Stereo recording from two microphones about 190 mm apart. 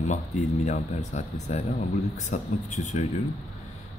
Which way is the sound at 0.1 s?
35° left (ahead or behind).